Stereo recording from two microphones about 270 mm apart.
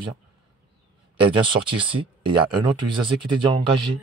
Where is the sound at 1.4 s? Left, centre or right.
Centre.